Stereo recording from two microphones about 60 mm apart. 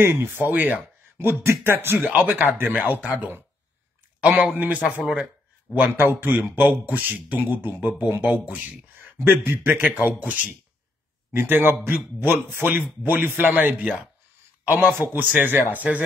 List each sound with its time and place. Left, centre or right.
0.0 s a man's voice: right
1.1 s a man's voice: right
2.0 s a man's voice: right
4.6 s speech: right
5.0 s speech: centre
5.8 s a man's voice: right